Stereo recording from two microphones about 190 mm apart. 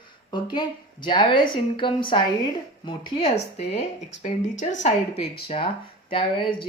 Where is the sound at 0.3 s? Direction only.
20° left (ahead or behind).